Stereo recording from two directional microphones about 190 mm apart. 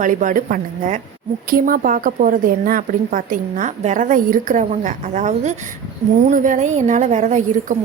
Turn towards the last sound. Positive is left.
turn(degrees=-40)  # may be behind; listen again after turning